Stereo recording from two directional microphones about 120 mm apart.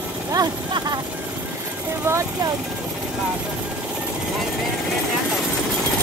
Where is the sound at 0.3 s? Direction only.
30° right (ahead or behind).